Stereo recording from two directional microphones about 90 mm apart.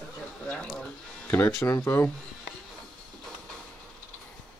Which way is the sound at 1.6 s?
30° left (ahead or behind).